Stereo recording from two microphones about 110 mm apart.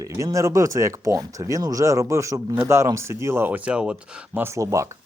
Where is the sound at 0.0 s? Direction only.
30° right (ahead or behind); by 3.9 s 10° right (ahead or behind).